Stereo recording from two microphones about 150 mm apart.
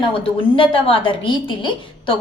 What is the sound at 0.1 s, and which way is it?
A woman's voice, 35° left (ahead or behind).